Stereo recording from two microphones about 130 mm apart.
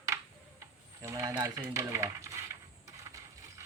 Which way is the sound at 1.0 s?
25° right (ahead or behind).